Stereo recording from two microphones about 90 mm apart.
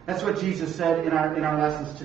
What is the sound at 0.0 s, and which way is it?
A man's voice, centre (ahead or behind).